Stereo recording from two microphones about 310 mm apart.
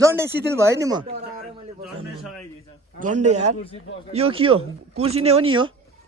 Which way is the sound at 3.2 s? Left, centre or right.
Right.